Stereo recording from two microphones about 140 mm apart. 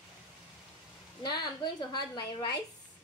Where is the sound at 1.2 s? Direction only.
30° left (ahead or behind).